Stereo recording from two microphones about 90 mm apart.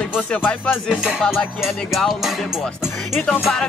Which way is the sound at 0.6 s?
20° left (ahead or behind).